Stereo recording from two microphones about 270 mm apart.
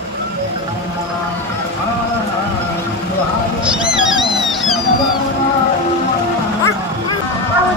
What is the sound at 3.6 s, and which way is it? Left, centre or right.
Cat, centre.